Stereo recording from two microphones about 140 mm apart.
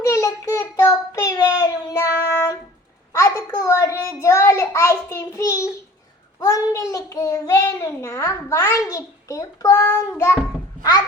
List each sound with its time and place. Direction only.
0.0 s child singing: 25° left (ahead or behind)
3.1 s a sound: 20° left (ahead or behind)
6.4 s a child's voice: 25° left (ahead or behind)